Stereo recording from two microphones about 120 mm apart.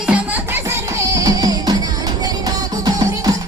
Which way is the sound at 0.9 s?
30° right (ahead or behind).